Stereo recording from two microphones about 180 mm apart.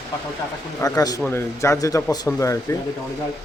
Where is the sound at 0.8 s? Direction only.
20° left (ahead or behind).